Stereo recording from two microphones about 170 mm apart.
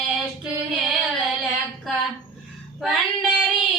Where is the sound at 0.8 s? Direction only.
Centre (ahead or behind).